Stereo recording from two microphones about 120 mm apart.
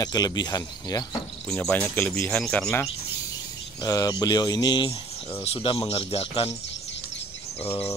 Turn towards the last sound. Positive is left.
turn(degrees=55)  # may be behind; listen again after turning